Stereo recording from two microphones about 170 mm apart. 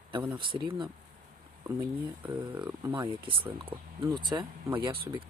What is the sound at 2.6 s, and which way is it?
Speech, 15° right (ahead or behind).